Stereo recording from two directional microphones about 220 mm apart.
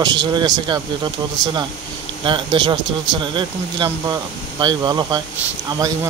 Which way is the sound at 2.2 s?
20° right (ahead or behind).